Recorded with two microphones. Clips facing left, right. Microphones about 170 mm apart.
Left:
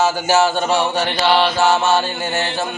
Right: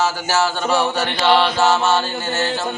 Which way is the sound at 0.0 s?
15° left (ahead or behind).